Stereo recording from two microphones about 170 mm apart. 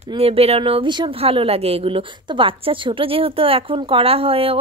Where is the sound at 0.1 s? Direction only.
35° right (ahead or behind).